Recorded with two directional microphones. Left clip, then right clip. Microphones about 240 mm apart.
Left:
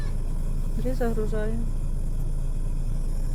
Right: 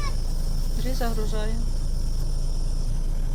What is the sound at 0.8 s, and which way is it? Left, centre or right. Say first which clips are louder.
Speech: left 3 dB; left.